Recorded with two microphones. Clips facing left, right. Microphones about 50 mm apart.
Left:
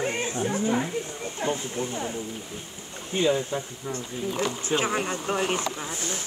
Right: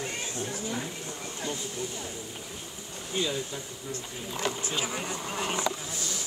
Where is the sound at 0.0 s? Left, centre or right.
Left.